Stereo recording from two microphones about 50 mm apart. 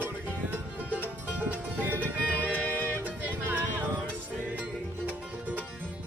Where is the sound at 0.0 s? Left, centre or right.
Right.